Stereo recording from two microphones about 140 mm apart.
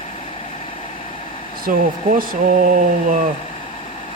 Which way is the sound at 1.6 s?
80° right.